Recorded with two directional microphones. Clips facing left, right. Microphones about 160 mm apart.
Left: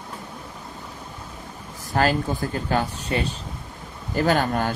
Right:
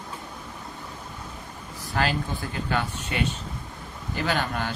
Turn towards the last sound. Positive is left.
turn(degrees=45)  # may be behind; listen again after turning